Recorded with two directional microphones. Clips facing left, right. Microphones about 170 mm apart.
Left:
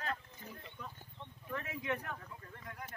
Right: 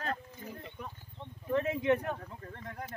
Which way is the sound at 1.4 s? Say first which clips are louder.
Right 11 dB; 25° right (ahead or behind).